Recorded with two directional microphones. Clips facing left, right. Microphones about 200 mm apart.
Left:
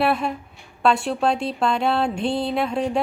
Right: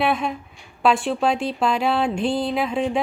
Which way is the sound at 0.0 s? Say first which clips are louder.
Left 1 dB; centre (ahead or behind).